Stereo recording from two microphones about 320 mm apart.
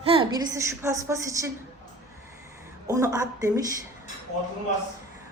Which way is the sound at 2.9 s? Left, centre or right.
Centre.